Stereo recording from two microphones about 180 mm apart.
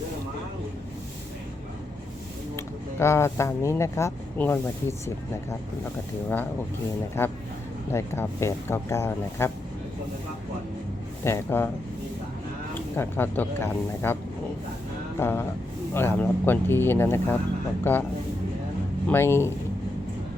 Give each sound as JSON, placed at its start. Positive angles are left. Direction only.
{"t": 2.6, "sound": "speech", "side_deg": 15}
{"t": 11.2, "sound": "speech", "side_deg": 15}
{"t": 13.0, "sound": "speech", "side_deg": 10}
{"t": 15.2, "sound": "speech", "side_deg": 15}
{"t": 19.0, "sound": "speech", "side_deg": 15}